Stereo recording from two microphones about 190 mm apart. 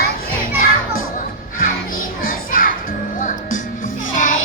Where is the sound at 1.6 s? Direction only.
45° left (ahead or behind).